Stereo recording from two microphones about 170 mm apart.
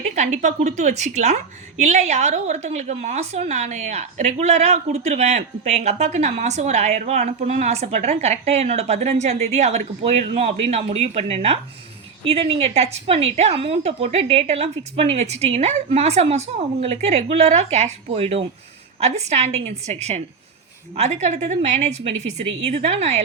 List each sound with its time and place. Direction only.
0.0 s a woman's voice: 45° right (ahead or behind)